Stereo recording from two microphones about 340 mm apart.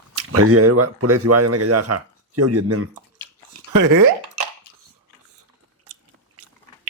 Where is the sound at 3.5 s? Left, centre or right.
Right.